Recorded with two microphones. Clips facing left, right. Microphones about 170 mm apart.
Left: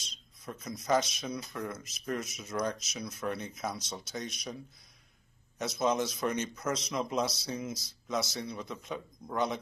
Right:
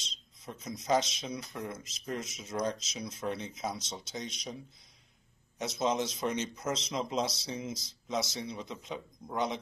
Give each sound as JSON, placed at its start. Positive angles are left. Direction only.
{"t": 0.5, "sound": "speech", "side_deg": -25}
{"t": 5.6, "sound": "speech", "side_deg": -25}